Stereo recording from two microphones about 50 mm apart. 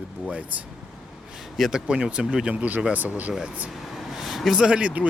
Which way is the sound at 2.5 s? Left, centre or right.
Right.